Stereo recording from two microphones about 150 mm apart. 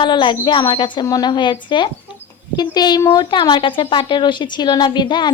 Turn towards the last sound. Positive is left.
turn(degrees=30)  # may be behind; listen again after turning